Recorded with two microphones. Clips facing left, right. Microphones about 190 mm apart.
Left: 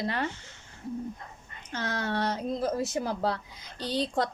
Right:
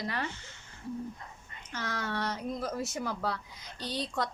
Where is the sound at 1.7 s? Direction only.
30° left (ahead or behind).